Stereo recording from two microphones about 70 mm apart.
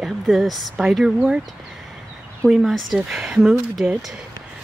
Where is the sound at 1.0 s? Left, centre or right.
Centre.